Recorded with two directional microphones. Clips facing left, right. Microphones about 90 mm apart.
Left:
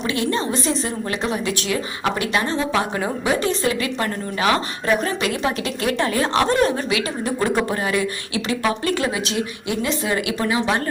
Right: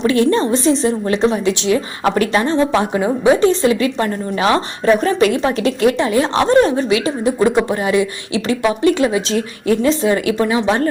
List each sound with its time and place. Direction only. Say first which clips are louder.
0.0 s a woman's voice: right 8 dB; 35° right (ahead or behind)